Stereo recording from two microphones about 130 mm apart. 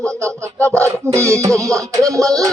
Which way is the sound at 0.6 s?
10° left (ahead or behind).